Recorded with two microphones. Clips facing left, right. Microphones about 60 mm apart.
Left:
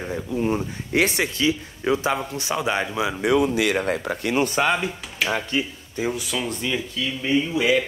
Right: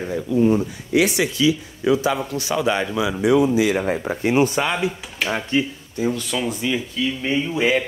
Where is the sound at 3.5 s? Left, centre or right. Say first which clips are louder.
Right 3 dB; left.